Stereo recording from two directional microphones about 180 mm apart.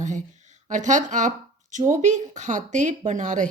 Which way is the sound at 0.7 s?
45° right (ahead or behind).